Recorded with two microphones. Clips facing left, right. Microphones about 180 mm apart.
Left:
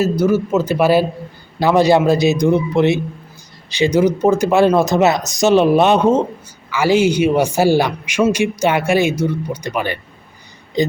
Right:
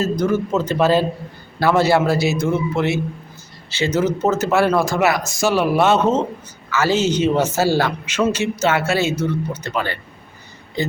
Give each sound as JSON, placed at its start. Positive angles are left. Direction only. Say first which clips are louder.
{"t": 0.0, "sound": "a man's voice", "louder": "left 4 dB", "side_deg": 10}